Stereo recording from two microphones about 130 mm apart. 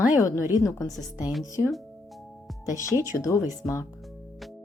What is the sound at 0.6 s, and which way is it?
Speech, 25° left (ahead or behind).